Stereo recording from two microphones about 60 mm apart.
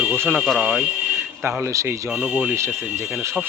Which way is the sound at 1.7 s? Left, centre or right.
Right.